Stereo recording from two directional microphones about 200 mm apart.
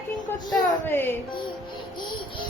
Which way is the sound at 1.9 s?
20° left (ahead or behind).